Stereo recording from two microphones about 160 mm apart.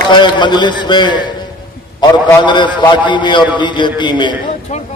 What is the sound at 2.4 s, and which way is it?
A man's voice, 30° left (ahead or behind).